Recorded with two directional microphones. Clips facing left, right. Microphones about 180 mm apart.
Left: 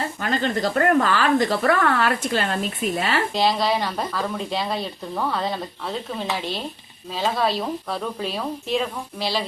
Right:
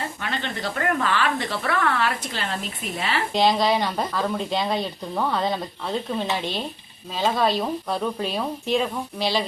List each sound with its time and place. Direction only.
0.2 s speech: 40° left (ahead or behind)
3.3 s speech: centre (ahead or behind)